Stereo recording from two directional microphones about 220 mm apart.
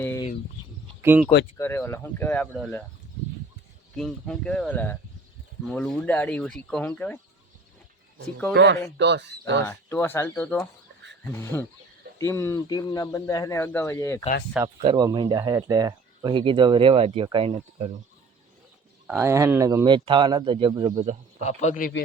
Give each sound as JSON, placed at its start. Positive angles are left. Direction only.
{"t": 1.0, "sound": "speech", "side_deg": -10}
{"t": 1.5, "sound": "speech", "side_deg": 10}
{"t": 3.9, "sound": "speech", "side_deg": 5}
{"t": 8.5, "sound": "speech", "side_deg": -55}
{"t": 9.6, "sound": "speech", "side_deg": 10}
{"t": 14.8, "sound": "speech", "side_deg": -20}
{"t": 19.0, "sound": "speech", "side_deg": -10}
{"t": 21.4, "sound": "speech", "side_deg": 30}